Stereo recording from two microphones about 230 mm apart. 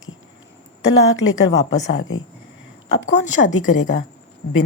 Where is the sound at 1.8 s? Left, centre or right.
Left.